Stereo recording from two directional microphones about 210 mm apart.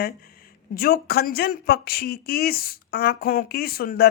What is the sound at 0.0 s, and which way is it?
Speech, 45° left (ahead or behind).